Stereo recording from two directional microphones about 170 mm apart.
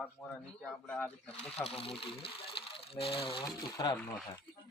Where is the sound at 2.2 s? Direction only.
30° left (ahead or behind).